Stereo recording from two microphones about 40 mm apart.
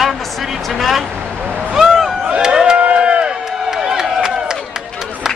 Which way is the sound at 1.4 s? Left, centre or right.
Right.